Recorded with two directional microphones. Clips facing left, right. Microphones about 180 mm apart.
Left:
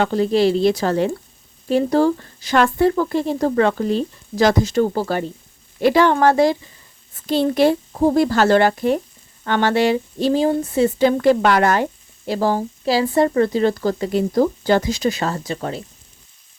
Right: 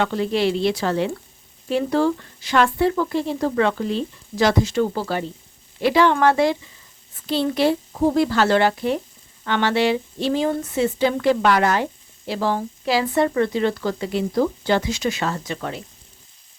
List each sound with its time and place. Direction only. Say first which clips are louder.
0.0 s speech: left 4 dB; 40° left (ahead or behind)